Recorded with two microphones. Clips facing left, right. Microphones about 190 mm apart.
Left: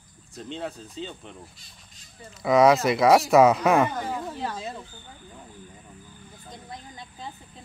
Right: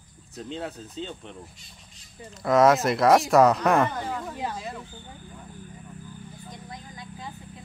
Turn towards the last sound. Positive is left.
turn(degrees=25)  # may be behind; listen again after turning